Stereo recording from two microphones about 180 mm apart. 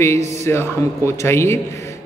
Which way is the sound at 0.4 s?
15° left (ahead or behind).